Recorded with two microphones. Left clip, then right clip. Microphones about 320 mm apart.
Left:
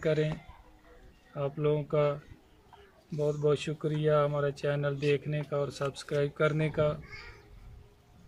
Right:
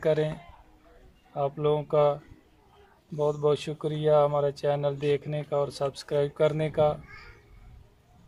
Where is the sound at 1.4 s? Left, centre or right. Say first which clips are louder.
Right 4 dB; centre.